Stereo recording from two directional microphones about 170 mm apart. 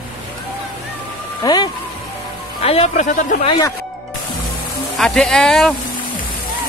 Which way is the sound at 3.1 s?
50° left (ahead or behind).